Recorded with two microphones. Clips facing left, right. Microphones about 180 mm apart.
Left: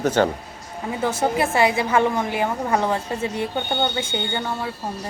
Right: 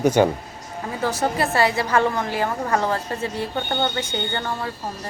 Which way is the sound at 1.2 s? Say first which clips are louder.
Left 1 dB; 20° left (ahead or behind).